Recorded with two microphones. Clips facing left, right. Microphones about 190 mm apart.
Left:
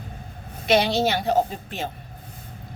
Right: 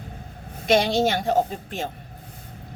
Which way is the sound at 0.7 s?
45° right (ahead or behind).